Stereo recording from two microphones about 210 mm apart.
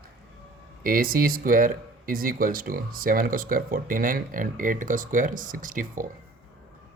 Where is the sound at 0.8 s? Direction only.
40° right (ahead or behind).